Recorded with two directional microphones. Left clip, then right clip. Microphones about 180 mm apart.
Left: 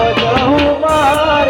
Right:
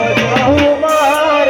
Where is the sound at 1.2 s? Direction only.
55° right (ahead or behind).